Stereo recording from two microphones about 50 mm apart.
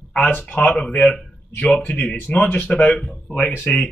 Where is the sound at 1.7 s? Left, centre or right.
Left.